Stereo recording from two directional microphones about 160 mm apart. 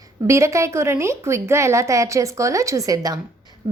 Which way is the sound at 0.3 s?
20° right (ahead or behind).